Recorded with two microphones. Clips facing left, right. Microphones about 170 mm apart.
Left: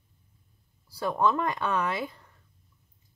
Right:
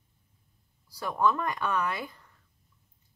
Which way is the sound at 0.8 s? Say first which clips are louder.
Left 1 dB; 25° left (ahead or behind).